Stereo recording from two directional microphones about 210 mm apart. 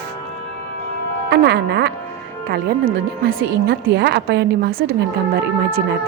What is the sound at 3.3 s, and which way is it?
Speech, 45° right (ahead or behind).